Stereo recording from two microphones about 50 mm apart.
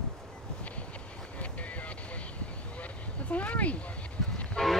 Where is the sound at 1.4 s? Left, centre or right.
Left.